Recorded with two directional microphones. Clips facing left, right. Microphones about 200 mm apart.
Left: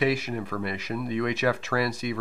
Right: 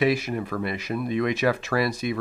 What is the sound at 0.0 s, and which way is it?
Speech, 15° right (ahead or behind).